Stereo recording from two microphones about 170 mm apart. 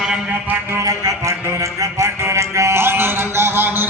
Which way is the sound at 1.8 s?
15° right (ahead or behind).